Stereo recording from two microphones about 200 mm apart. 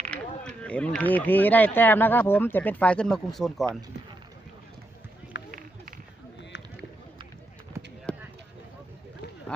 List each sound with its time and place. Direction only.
0.1 s speech: 5° left (ahead or behind)
5.5 s run: 45° right (ahead or behind)
8.1 s a sound: 5° left (ahead or behind)